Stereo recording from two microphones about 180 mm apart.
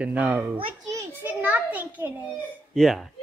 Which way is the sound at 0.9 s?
10° right (ahead or behind).